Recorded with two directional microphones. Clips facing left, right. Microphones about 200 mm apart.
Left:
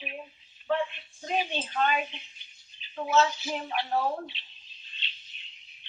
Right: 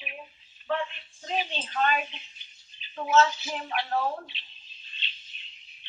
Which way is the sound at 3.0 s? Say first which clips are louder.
Right 2 dB; 15° left (ahead or behind).